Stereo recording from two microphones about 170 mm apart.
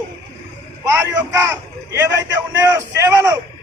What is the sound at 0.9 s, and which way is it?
Vehicle, 15° right (ahead or behind).